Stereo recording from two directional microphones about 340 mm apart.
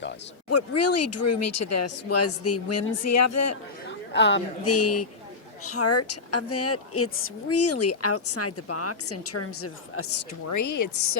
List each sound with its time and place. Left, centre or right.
0.5 s speech: left
4.1 s speech: left
10.5 s speech: left